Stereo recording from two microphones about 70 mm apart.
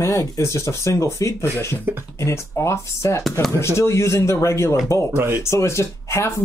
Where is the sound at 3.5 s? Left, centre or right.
Left.